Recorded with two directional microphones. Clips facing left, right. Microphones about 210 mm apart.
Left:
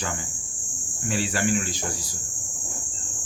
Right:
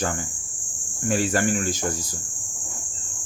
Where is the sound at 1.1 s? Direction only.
45° right (ahead or behind).